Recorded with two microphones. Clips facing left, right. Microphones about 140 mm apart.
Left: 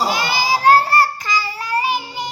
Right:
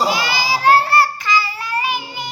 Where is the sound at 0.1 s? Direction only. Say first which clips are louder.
Left 1 dB; 50° left (ahead or behind).